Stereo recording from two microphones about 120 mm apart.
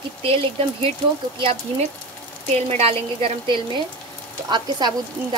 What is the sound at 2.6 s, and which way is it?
Speech, 55° right (ahead or behind).